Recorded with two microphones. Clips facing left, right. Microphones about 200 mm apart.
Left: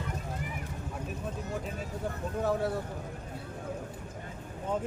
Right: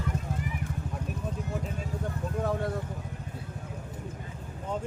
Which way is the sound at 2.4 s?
Centre (ahead or behind).